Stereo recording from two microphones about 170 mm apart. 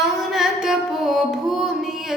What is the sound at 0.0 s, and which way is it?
Music, centre (ahead or behind).